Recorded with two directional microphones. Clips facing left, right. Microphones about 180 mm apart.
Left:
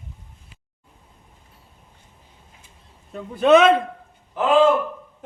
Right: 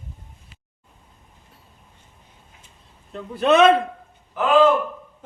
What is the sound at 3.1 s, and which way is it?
Speech, 10° left (ahead or behind).